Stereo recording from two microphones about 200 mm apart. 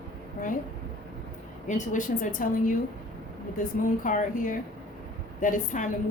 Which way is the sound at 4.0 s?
40° left (ahead or behind).